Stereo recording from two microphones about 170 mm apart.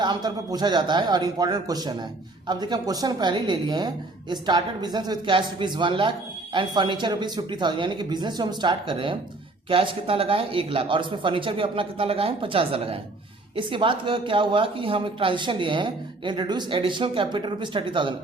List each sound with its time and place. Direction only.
0.0 s speech: 25° right (ahead or behind)